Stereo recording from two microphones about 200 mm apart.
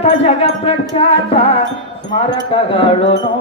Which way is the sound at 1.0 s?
25° left (ahead or behind).